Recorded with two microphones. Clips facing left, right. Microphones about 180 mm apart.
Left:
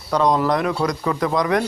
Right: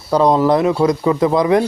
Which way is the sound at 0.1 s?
30° right (ahead or behind).